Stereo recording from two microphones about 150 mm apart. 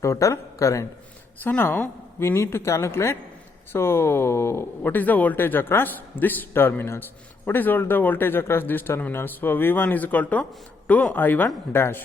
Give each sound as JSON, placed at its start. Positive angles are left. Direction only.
{"t": 0.0, "sound": "speech", "side_deg": 20}